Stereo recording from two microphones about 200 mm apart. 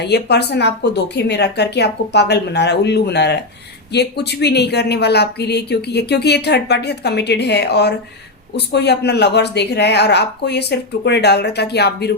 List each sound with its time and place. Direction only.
0.0 s speech: 55° left (ahead or behind)